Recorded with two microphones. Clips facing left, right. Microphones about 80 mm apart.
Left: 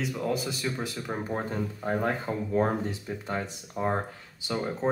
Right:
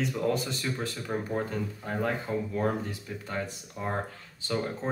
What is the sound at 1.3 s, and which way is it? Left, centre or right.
Speech, left.